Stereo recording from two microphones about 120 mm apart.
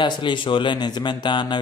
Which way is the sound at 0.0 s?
40° left (ahead or behind).